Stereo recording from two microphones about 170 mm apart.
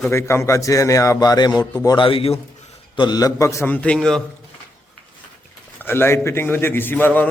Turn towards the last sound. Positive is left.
turn(degrees=10)  # may be behind; listen again after turning